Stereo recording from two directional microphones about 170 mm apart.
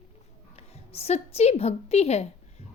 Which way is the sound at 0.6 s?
35° left (ahead or behind).